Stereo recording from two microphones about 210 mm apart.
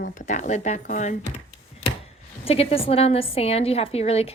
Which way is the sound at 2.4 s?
25° left (ahead or behind).